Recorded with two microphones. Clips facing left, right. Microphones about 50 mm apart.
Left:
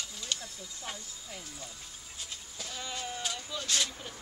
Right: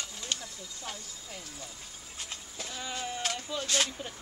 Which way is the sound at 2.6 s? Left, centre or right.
Centre.